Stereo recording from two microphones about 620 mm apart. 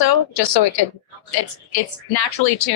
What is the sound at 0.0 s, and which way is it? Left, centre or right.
A woman's voice, left.